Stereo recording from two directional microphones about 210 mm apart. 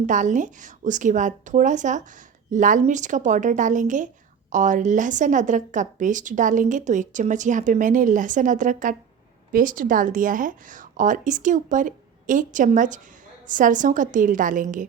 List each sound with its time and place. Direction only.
0.0 s speech: 35° right (ahead or behind)